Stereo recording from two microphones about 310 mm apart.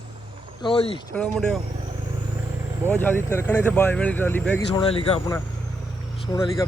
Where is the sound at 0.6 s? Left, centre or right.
Centre.